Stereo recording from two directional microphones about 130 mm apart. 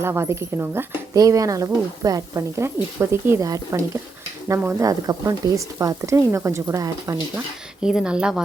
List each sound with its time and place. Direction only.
0.0 s speech: 20° right (ahead or behind)
7.8 s a woman's voice: 5° right (ahead or behind)